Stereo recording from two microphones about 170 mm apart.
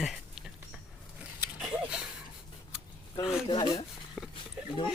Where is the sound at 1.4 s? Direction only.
5° right (ahead or behind).